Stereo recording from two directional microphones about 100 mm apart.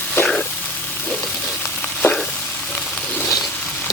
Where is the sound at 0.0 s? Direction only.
15° left (ahead or behind).